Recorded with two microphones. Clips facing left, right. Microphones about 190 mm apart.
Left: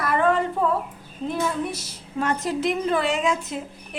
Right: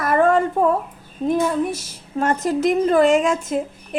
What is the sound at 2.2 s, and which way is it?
Speech, 45° right (ahead or behind).